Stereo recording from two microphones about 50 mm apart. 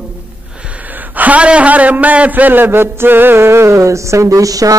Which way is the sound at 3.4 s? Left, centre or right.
Right.